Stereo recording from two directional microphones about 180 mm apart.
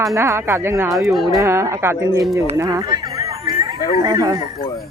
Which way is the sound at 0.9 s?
Centre (ahead or behind).